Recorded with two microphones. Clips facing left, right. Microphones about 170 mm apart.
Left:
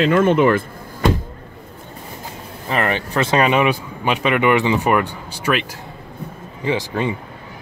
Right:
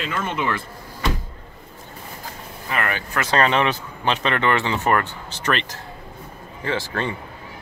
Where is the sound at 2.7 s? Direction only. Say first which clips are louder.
Left 5 dB; 30° left (ahead or behind).